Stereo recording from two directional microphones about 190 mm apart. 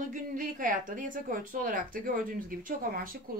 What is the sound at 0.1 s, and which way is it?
Speech, 45° right (ahead or behind).